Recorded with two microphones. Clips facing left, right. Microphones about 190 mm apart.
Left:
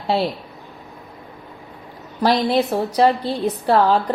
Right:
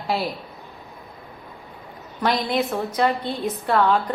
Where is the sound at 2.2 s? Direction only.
35° left (ahead or behind).